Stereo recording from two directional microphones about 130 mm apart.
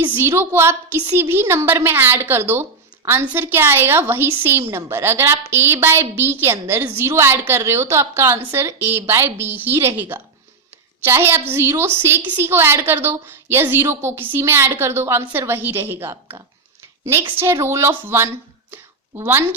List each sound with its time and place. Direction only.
0.0 s a woman's voice: 15° right (ahead or behind)